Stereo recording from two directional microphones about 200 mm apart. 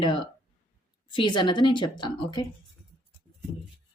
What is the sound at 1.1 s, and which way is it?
A woman's voice, 25° left (ahead or behind).